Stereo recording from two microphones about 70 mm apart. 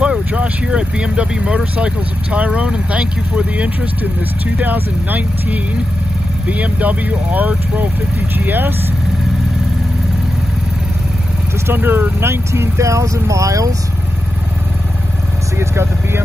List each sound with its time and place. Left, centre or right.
0.0 s speech: centre
11.6 s speech: right
15.7 s speech: right